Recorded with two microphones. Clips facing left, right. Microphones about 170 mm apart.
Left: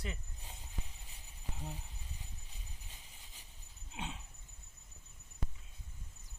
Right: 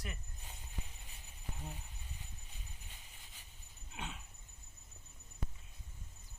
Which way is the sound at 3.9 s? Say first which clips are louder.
Left 2 dB; 20° left (ahead or behind).